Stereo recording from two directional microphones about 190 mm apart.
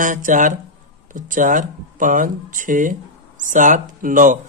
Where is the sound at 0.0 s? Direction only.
45° right (ahead or behind).